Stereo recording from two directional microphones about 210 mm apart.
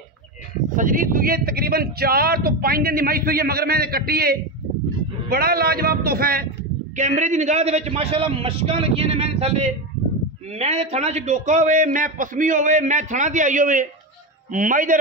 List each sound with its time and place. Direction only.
0.7 s speech: 40° right (ahead or behind)
7.0 s a man's voice: 35° right (ahead or behind)